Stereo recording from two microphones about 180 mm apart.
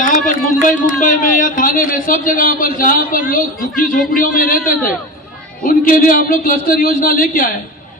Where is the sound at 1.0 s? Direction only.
50° left (ahead or behind).